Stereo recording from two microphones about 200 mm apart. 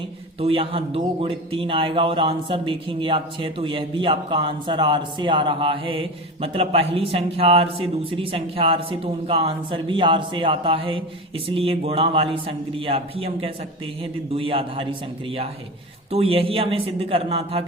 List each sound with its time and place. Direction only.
0.3 s a man's voice: 30° right (ahead or behind)
16.1 s a man's voice: 30° right (ahead or behind)